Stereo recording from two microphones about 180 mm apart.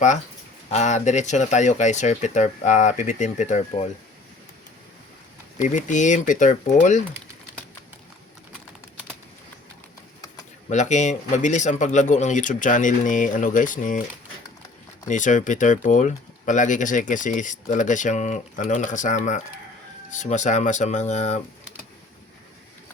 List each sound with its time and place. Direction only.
0.7 s speech: 40° left (ahead or behind)
5.6 s speech: 45° left (ahead or behind)
10.7 s speech: 40° left (ahead or behind)
15.0 s speech: 45° left (ahead or behind)